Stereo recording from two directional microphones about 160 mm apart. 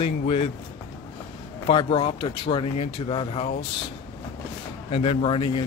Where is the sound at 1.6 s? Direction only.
30° left (ahead or behind).